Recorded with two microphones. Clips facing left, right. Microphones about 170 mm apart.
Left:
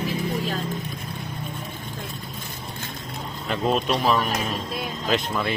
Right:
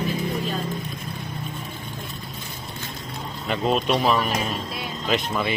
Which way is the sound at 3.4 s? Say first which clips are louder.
Right 1 dB; centre (ahead or behind).